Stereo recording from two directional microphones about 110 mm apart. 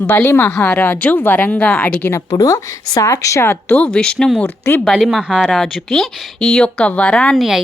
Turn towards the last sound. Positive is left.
turn(degrees=0)  # may be behind; listen again after turning